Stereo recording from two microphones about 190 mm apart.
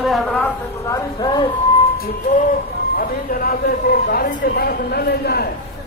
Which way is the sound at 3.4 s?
50° left (ahead or behind).